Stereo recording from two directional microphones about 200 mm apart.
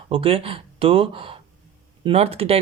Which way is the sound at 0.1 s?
30° right (ahead or behind).